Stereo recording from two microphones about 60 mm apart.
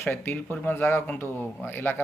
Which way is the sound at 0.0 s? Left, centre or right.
Left.